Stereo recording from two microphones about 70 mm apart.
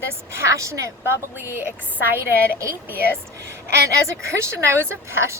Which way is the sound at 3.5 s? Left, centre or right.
Right.